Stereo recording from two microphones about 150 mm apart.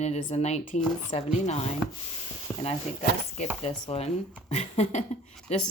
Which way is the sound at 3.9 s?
45° left (ahead or behind).